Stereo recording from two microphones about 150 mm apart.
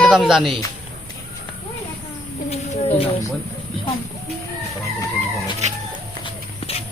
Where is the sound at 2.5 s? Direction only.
45° left (ahead or behind).